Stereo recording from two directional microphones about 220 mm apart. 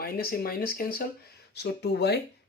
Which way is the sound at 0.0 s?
45° left (ahead or behind).